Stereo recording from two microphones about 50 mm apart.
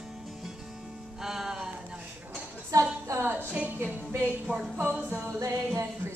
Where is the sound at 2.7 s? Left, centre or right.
Right.